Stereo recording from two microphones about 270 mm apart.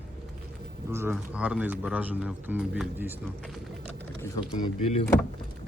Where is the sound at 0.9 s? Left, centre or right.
Centre.